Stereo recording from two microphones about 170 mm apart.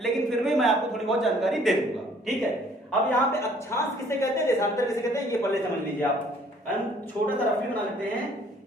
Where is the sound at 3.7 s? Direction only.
15° left (ahead or behind).